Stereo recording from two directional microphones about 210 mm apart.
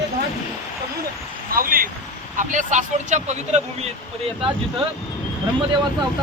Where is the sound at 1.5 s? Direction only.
45° right (ahead or behind).